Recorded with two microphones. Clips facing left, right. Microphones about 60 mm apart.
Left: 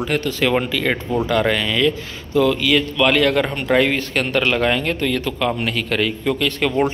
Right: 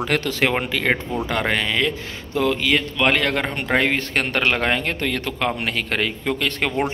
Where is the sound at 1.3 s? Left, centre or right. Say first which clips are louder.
Left 2 dB; right.